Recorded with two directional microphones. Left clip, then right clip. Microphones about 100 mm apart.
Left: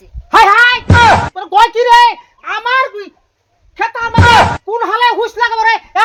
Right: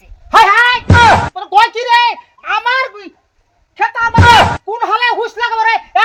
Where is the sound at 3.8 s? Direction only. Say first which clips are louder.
Right 3 dB; 35° left (ahead or behind).